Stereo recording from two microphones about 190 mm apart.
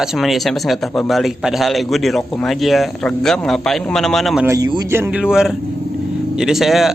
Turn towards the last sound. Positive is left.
turn(degrees=0)  # may be behind; listen again after turning